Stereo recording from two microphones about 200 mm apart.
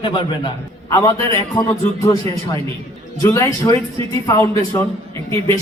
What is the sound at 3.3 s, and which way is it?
A man's voice, 15° left (ahead or behind).